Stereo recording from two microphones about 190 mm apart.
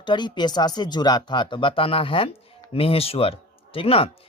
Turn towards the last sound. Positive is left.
turn(degrees=30)  # may be behind; listen again after turning